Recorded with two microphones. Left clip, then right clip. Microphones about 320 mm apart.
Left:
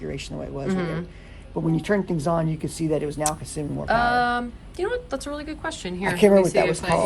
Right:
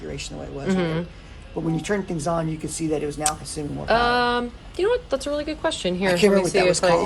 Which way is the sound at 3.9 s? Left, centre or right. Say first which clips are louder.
Right 1 dB; centre.